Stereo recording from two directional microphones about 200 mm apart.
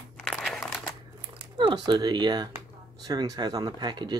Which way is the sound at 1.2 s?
20° right (ahead or behind).